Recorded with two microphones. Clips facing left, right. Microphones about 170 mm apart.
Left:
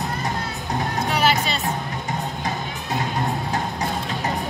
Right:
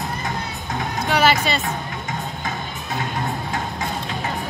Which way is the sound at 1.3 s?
Centre (ahead or behind).